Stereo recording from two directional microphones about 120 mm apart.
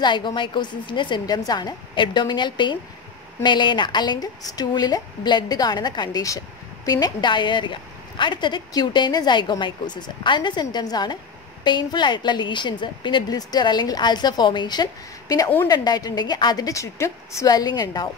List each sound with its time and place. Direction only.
0.0 s a woman's voice: 40° left (ahead or behind)